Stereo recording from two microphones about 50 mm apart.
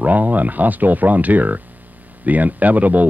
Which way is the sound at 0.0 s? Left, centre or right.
Right.